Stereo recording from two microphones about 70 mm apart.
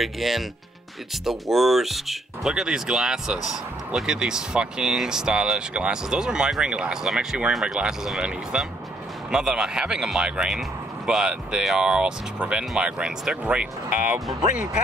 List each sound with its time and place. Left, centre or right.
0.0 s speech: centre